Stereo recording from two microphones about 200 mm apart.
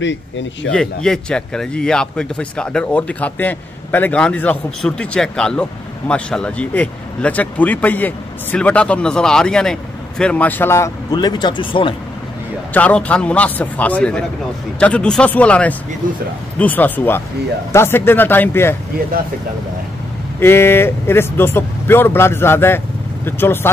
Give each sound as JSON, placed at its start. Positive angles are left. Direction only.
{"t": 0.0, "sound": "speech", "side_deg": 65}
{"t": 0.7, "sound": "speech", "side_deg": 5}
{"t": 12.7, "sound": "speech", "side_deg": 5}
{"t": 20.3, "sound": "speech", "side_deg": 10}